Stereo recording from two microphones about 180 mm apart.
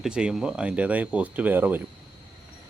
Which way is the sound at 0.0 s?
5° right (ahead or behind).